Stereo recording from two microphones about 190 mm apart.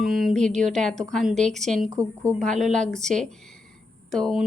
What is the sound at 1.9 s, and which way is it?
Speech, 15° right (ahead or behind).